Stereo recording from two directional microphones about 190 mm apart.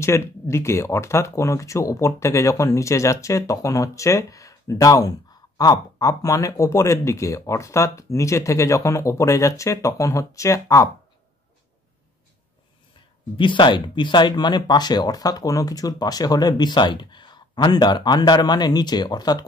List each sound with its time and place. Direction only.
0.0 s speech: 15° left (ahead or behind)
13.4 s speech: 25° left (ahead or behind)